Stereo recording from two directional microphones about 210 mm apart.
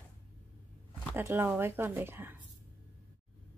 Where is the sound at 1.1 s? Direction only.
10° right (ahead or behind).